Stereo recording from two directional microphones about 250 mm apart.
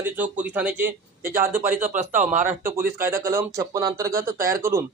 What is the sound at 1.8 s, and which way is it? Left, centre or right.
Speech, right.